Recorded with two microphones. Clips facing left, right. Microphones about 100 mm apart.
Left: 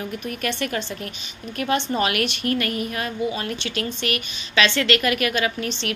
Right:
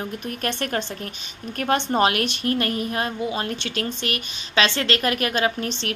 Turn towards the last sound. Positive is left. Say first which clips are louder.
# right 1 dB
turn(degrees=-35)  # may be behind; listen again after turning